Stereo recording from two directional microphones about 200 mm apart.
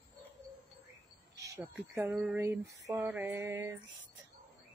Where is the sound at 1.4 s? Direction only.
15° right (ahead or behind).